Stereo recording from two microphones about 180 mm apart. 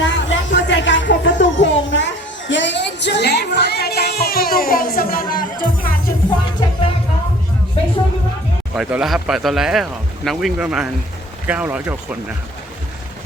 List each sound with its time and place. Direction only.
0.0 s music: 85° left; by 6.0 s 50° left (ahead or behind)
8.7 s speech: 5° right (ahead or behind)